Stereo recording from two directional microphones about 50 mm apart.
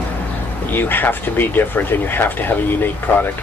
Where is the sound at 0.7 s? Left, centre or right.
Left.